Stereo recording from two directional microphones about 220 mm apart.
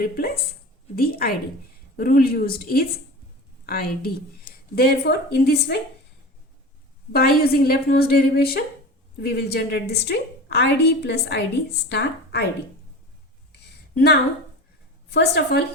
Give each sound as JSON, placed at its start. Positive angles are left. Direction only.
{"t": 0.0, "sound": "a woman's voice", "side_deg": 45}
{"t": 7.1, "sound": "a woman's voice", "side_deg": 45}
{"t": 13.5, "sound": "a sound", "side_deg": 45}
{"t": 15.1, "sound": "a woman's voice", "side_deg": 45}